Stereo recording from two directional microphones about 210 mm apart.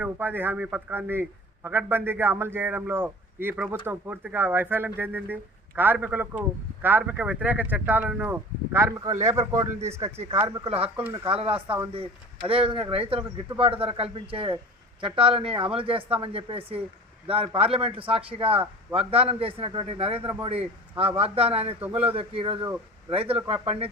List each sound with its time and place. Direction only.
0.0 s a man's voice: 10° right (ahead or behind)
10.2 s speech: 25° right (ahead or behind)